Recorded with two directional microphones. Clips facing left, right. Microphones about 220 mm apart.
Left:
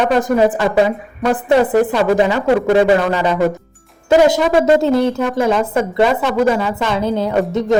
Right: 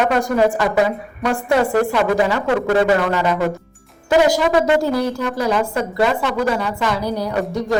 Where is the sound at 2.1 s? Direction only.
20° left (ahead or behind).